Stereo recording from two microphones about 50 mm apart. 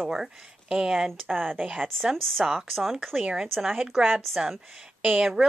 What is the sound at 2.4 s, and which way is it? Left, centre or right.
A woman's voice, centre.